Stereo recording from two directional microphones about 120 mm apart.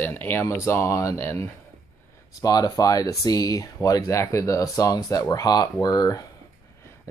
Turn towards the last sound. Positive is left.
turn(degrees=30)  # may be behind; listen again after turning